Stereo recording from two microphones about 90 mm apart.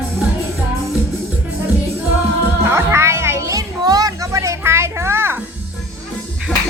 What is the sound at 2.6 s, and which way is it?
Music, 25° right (ahead or behind).